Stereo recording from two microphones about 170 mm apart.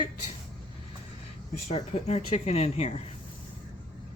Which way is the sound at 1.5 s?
45° left (ahead or behind).